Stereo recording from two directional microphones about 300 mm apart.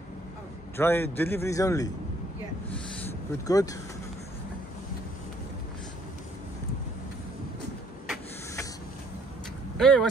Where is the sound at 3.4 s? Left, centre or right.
Centre.